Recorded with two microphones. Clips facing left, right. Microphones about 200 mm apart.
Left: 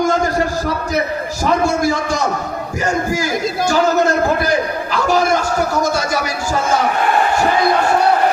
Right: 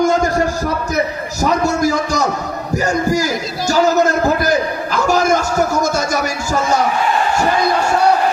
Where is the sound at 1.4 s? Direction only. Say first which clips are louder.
Right 1 dB; 40° right (ahead or behind).